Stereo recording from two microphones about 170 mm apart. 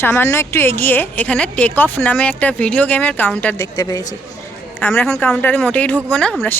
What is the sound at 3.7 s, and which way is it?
Speech, 20° left (ahead or behind).